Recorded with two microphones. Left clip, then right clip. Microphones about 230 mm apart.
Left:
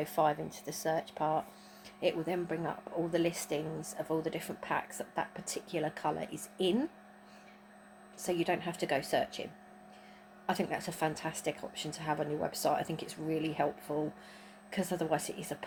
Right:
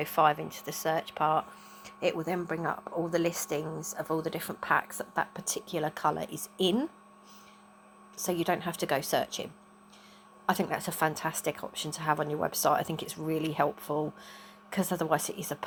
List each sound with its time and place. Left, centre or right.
0.0 s speech: centre
1.8 s a sound: centre
2.2 s a woman's voice: centre
8.2 s speech: right
10.4 s a woman's voice: right